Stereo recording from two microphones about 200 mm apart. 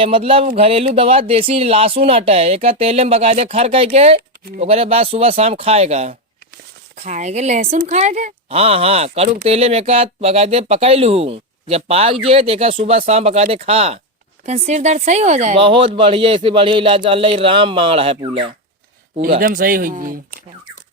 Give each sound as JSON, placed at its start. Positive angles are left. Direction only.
{"t": 0.0, "sound": "a woman's voice", "side_deg": -25}
{"t": 19.4, "sound": "speech", "side_deg": -45}